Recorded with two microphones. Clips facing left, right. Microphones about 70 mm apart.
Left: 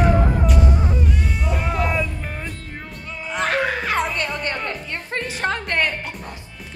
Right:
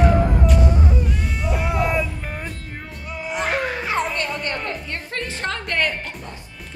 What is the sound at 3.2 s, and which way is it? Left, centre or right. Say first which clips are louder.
Music: left 2 dB; centre.